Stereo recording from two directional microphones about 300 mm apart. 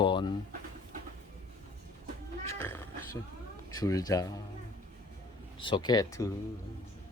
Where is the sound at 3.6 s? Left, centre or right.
Centre.